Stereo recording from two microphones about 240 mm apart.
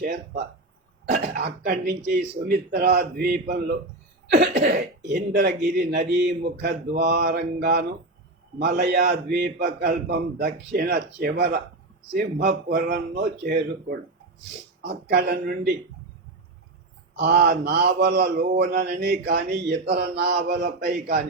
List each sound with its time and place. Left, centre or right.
0.0 s speech: right
17.2 s speech: right